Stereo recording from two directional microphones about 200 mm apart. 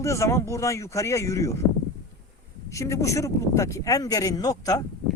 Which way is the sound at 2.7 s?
15° left (ahead or behind).